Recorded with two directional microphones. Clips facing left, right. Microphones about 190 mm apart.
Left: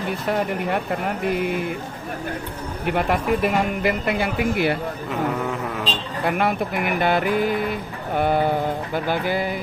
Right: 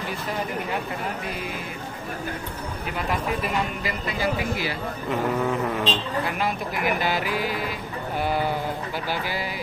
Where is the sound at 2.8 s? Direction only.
60° left (ahead or behind).